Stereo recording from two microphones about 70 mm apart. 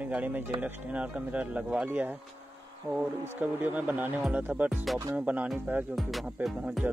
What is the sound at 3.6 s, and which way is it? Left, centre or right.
Speech, right.